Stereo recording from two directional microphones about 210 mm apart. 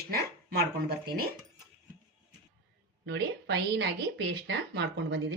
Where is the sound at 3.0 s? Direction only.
50° right (ahead or behind).